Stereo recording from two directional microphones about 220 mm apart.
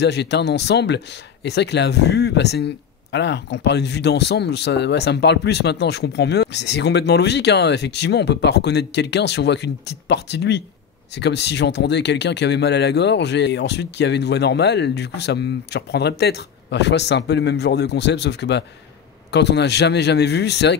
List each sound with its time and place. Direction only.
0.0 s speech: 50° left (ahead or behind)